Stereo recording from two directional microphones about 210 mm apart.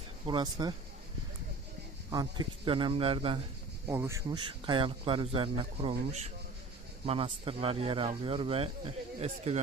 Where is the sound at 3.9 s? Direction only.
10° right (ahead or behind).